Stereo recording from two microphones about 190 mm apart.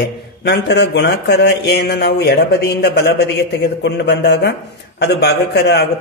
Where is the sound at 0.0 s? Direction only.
60° left (ahead or behind).